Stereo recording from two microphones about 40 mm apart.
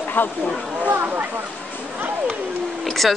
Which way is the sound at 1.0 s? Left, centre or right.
Right.